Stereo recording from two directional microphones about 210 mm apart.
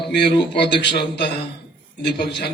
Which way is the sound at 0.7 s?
20° left (ahead or behind).